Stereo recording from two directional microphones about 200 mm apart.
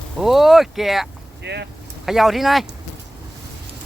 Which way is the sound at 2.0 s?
Centre (ahead or behind).